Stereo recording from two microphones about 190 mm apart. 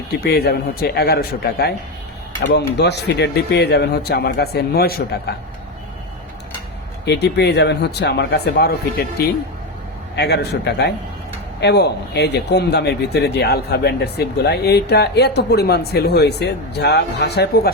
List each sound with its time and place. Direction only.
0.3 s speech: 55° left (ahead or behind)
7.0 s speech: 60° left (ahead or behind)
10.2 s speech: 60° left (ahead or behind)